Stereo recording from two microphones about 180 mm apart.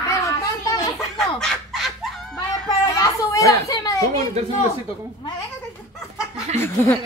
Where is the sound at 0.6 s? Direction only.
20° left (ahead or behind).